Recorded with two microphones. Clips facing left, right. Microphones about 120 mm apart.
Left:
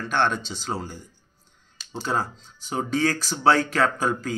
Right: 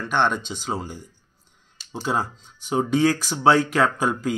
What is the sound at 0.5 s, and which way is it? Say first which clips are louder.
Speech: right 3 dB; 10° right (ahead or behind).